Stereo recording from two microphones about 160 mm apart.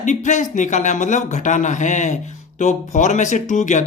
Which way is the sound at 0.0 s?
50° left (ahead or behind).